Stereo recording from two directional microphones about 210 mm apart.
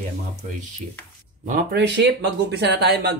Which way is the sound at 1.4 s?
40° right (ahead or behind).